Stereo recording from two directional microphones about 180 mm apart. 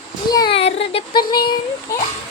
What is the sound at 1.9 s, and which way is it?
Speech, 15° left (ahead or behind).